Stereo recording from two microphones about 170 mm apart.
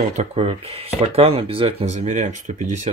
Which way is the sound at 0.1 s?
40° right (ahead or behind).